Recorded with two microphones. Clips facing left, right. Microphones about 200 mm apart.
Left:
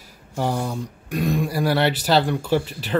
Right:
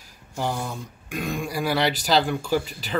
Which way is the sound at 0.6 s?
35° left (ahead or behind).